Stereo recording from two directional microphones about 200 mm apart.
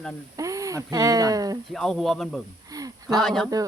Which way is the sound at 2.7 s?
20° right (ahead or behind).